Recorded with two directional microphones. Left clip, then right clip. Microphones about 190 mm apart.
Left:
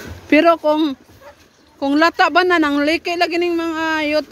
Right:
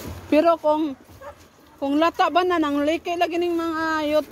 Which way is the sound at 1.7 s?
40° left (ahead or behind).